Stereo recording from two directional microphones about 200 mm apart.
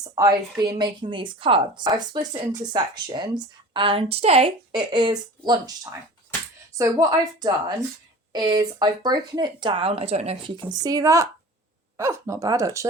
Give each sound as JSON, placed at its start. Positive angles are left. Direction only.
{"t": 0.0, "sound": "a woman's voice", "side_deg": -20}